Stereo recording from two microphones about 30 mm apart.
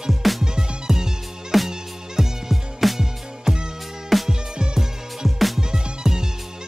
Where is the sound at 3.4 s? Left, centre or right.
Right.